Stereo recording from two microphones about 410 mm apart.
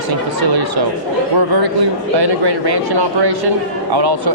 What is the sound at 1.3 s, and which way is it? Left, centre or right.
Speech, right.